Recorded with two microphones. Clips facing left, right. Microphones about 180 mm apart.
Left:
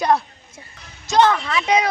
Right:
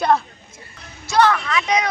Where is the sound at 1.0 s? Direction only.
20° left (ahead or behind).